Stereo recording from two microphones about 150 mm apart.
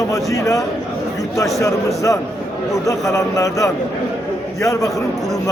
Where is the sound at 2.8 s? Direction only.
20° left (ahead or behind).